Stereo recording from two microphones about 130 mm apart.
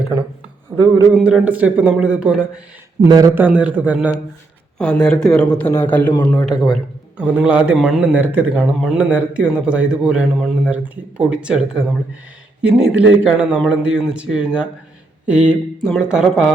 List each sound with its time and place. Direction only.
1.1 s a man's voice: 5° right (ahead or behind)
3.1 s speech: 30° right (ahead or behind)
3.3 s a man's voice: 10° right (ahead or behind)
4.8 s a man's voice: 5° left (ahead or behind)
6.3 s a man's voice: centre (ahead or behind)